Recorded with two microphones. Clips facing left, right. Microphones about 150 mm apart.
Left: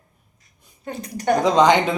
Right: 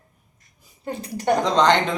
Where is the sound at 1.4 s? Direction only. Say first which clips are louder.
Left 4 dB; 10° left (ahead or behind).